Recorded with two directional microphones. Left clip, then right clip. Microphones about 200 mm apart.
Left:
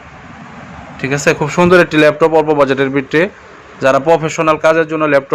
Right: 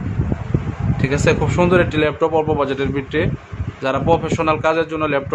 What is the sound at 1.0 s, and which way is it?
Speech, 20° left (ahead or behind).